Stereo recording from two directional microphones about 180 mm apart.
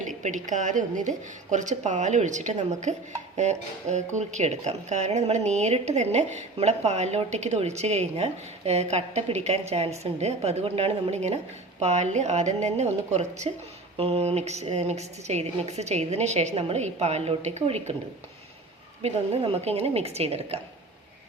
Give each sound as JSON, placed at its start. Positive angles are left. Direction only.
{"t": 0.2, "sound": "a woman's voice", "side_deg": -45}
{"t": 19.0, "sound": "speech", "side_deg": -35}